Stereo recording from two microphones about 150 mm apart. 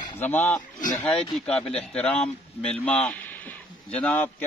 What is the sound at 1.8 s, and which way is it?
A man's voice, 5° left (ahead or behind).